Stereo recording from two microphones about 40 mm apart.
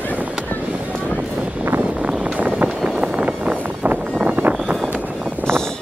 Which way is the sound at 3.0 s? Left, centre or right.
Right.